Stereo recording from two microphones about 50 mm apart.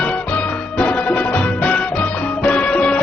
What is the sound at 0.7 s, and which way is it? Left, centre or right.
Music, left.